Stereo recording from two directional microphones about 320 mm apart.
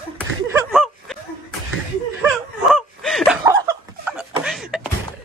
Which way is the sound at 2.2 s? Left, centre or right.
Centre.